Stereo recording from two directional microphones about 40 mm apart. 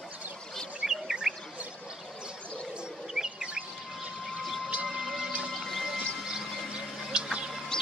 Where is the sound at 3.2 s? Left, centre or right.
Centre.